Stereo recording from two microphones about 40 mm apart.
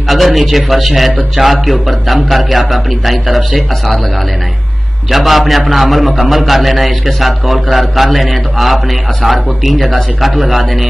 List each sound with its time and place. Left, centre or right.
0.1 s a man's voice: centre
5.1 s a man's voice: centre